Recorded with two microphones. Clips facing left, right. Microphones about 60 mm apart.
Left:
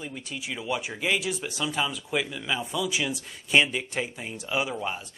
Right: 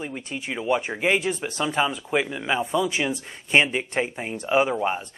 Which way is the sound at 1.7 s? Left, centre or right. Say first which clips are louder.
Right 6 dB; right.